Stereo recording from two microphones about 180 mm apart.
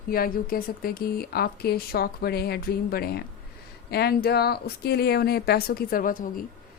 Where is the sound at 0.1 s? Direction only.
55° left (ahead or behind).